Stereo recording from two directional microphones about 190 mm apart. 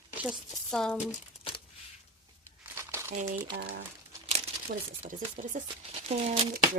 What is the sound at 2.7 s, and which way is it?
Crumpling, 15° right (ahead or behind).